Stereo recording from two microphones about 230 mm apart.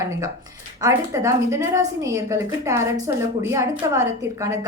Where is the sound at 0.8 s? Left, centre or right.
Centre.